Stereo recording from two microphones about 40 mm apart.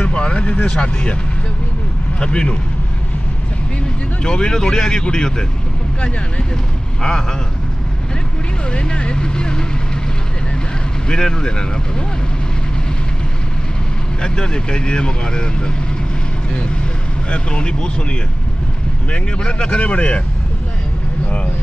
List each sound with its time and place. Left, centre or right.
0.0 s a sound: left
0.7 s speech: left
2.1 s a man's voice: left
4.2 s speech: centre
8.7 s vehicle: left
11.1 s speech: centre
14.2 s speech: centre
17.3 s speech: left
19.1 s speech: left